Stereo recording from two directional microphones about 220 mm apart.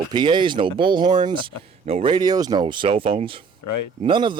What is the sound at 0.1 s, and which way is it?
Speech, 20° right (ahead or behind).